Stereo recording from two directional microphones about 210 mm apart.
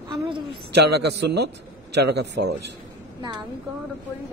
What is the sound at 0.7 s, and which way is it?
A man's voice, 55° right (ahead or behind).